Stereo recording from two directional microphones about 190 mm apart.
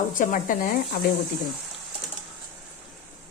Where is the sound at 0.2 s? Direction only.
45° left (ahead or behind).